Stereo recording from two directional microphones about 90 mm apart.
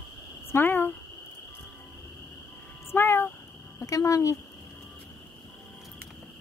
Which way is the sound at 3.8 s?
40° left (ahead or behind).